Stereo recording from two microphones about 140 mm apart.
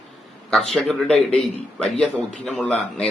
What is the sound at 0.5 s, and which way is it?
A man's voice, centre (ahead or behind).